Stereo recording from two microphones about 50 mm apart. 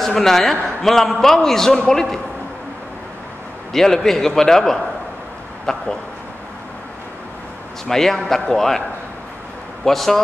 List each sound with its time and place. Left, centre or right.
0.0 s a man's voice: centre
3.7 s a man's voice: centre
7.9 s a man's voice: centre
9.8 s a man's voice: centre